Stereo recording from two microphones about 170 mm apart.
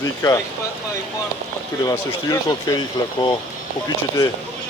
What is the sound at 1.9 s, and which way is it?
Speech, 20° left (ahead or behind).